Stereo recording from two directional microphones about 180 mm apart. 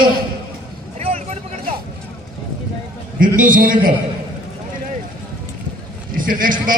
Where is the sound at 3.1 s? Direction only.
50° right (ahead or behind).